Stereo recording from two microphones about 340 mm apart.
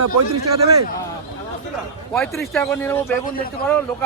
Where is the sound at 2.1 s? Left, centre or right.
Centre.